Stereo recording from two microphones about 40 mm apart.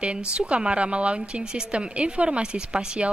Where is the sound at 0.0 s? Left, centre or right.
Right.